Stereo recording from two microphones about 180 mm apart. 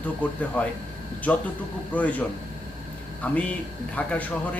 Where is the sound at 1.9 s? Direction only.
10° left (ahead or behind).